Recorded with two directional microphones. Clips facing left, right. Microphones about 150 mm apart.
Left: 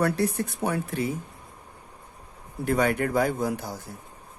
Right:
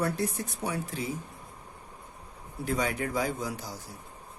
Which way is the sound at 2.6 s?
60° left (ahead or behind).